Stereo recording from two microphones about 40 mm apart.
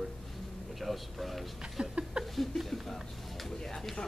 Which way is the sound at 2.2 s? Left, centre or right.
Centre.